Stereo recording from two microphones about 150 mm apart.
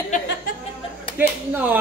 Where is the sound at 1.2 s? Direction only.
10° right (ahead or behind).